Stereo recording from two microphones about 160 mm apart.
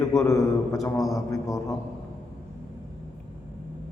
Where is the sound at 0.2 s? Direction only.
20° left (ahead or behind).